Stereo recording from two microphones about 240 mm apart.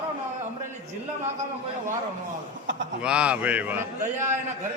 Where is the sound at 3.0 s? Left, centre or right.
Centre.